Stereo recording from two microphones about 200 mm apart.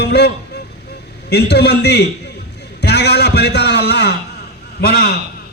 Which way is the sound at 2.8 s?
55° left (ahead or behind).